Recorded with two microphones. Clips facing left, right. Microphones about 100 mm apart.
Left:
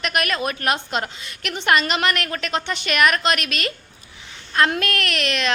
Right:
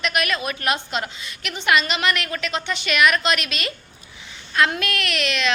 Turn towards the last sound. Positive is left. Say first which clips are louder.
# left 1 dB
turn(degrees=45)  # may be behind; listen again after turning